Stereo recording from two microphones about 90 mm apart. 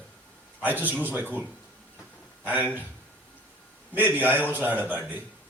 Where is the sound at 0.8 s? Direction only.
20° right (ahead or behind).